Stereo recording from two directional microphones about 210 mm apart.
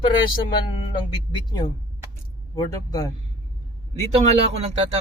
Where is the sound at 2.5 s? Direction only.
15° left (ahead or behind).